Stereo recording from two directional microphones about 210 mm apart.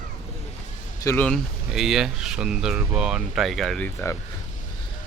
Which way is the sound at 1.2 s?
Centre (ahead or behind).